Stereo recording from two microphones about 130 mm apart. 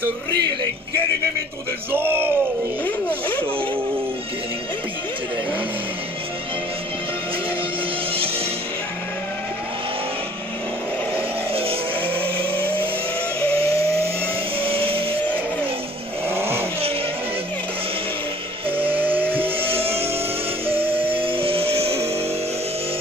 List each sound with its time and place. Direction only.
1.9 s speech: 15° right (ahead or behind)
11.1 s vehicle: 45° right (ahead or behind)
16.3 s vehicle: 20° right (ahead or behind)
18.7 s music: 45° right (ahead or behind)
19.4 s vehicle: 45° right (ahead or behind)
20.6 s music: 45° right (ahead or behind)